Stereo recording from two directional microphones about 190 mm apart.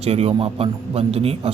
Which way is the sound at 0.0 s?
35° right (ahead or behind).